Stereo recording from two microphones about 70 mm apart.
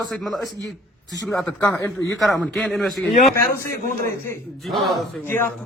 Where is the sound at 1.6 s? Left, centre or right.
Left.